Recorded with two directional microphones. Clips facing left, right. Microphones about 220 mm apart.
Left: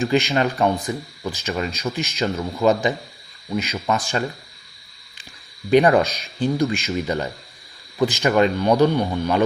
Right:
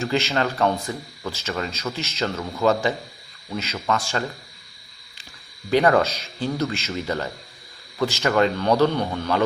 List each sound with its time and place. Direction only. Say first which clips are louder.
0.0 s speech: left 4 dB; 15° left (ahead or behind)
5.7 s speech: left 3 dB; 20° left (ahead or behind)